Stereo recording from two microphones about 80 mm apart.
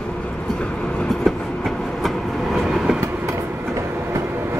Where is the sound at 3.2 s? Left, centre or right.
Right.